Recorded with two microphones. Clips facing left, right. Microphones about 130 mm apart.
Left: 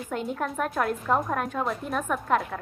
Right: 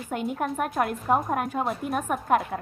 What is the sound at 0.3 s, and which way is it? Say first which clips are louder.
A woman's voice: right 2 dB; 20° right (ahead or behind).